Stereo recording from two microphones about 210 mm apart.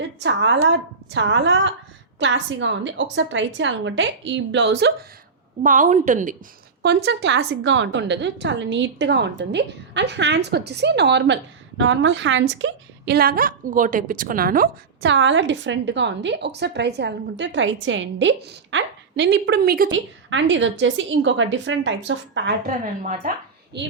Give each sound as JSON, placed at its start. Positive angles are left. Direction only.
{"t": 0.2, "sound": "a woman's voice", "side_deg": -60}
{"t": 5.6, "sound": "a woman's voice", "side_deg": -35}
{"t": 6.8, "sound": "a woman's voice", "side_deg": -55}
{"t": 15.0, "sound": "a woman's voice", "side_deg": -60}
{"t": 19.9, "sound": "a woman's voice", "side_deg": -60}
{"t": 22.6, "sound": "a woman's voice", "side_deg": -40}
{"t": 23.7, "sound": "a woman's voice", "side_deg": -55}